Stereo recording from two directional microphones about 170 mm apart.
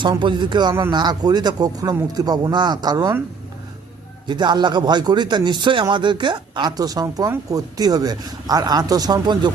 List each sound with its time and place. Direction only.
0.0 s speech: 30° right (ahead or behind)
4.3 s speech: 25° right (ahead or behind)